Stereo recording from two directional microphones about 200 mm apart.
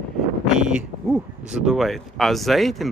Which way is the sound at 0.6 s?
5° right (ahead or behind).